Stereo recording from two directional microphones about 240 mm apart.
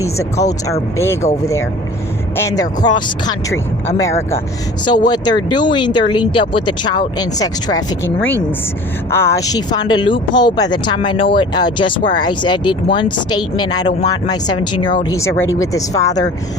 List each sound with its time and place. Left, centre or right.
0.0 s speech: centre
2.3 s speech: centre